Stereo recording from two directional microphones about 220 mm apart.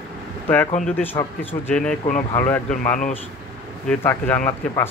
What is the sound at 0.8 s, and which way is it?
Speech, 10° left (ahead or behind).